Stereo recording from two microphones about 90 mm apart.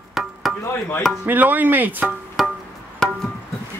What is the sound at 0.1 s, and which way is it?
Music, centre (ahead or behind).